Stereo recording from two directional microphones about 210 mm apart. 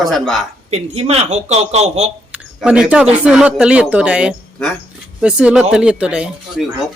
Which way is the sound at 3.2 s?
5° right (ahead or behind).